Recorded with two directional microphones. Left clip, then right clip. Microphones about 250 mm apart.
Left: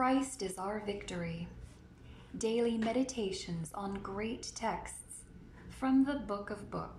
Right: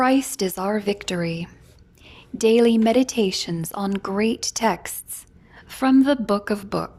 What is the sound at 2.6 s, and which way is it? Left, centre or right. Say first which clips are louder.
A woman's voice: right 13 dB; right.